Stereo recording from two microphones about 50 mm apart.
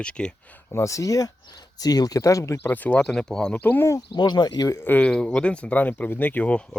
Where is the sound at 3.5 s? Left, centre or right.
Left.